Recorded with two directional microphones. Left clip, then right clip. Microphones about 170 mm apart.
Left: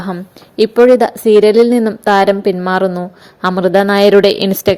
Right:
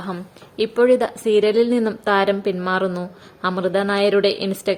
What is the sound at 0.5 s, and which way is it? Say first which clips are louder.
A woman's voice: left 8 dB; 40° left (ahead or behind).